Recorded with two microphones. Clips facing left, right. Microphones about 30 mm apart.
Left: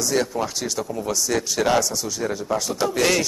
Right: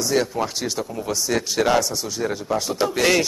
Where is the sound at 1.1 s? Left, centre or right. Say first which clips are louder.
Right 2 dB; centre.